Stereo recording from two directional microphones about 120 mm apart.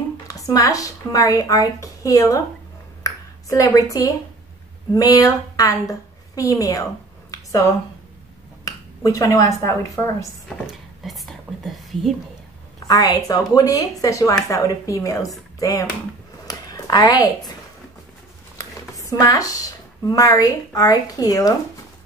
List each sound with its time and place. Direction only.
0.3 s a woman's voice: 30° left (ahead or behind)
3.0 s a sound: 30° left (ahead or behind)
4.9 s a woman's voice: 30° left (ahead or behind)
10.7 s whispering: centre (ahead or behind)
12.8 s a woman's voice: 30° left (ahead or behind)
16.4 s a sound: 30° left (ahead or behind)
18.9 s speech: 30° left (ahead or behind)